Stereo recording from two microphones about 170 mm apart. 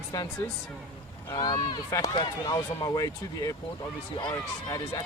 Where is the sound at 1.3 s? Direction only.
25° left (ahead or behind).